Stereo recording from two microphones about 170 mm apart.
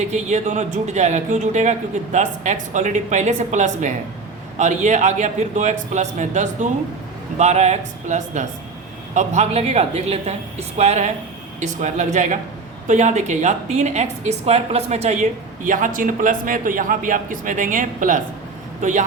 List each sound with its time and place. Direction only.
0.0 s a woman's voice: 45° right (ahead or behind)